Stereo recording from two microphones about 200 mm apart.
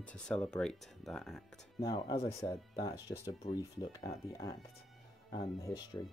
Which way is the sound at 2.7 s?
20° left (ahead or behind).